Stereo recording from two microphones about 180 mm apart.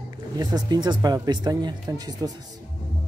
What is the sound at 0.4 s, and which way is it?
Speech, 20° right (ahead or behind).